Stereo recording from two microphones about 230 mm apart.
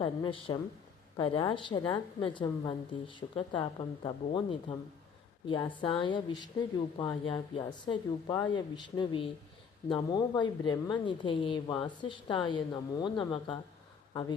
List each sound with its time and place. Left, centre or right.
0.0 s a woman's voice: left